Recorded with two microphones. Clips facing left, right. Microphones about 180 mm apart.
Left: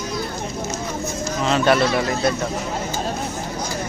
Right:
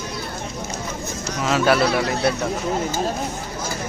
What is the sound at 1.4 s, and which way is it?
Speech, 5° right (ahead or behind).